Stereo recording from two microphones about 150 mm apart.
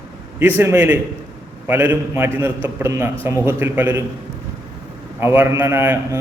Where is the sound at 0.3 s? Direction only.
15° right (ahead or behind).